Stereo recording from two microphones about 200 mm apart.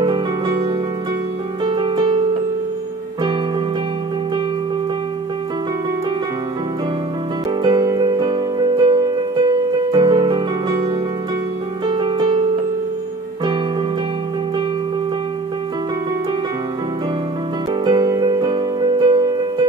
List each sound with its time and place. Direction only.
0.0 s music: 25° right (ahead or behind)
7.6 s music: 20° right (ahead or behind)
11.9 s music: 25° right (ahead or behind)
17.8 s music: 20° right (ahead or behind)